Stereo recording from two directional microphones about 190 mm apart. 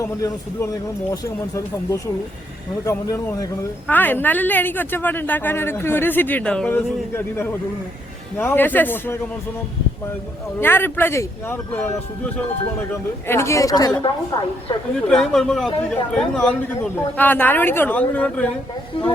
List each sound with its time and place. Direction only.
0.0 s a woman's voice: 15° left (ahead or behind)
10.6 s a woman's voice: 10° left (ahead or behind)
15.1 s a woman's voice: centre (ahead or behind)
18.9 s a woman's voice: 30° left (ahead or behind)